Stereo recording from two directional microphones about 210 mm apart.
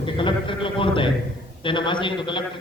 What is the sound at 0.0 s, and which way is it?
A man's voice, 25° left (ahead or behind).